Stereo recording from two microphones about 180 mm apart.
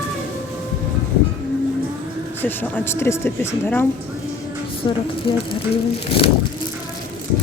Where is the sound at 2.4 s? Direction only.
10° left (ahead or behind).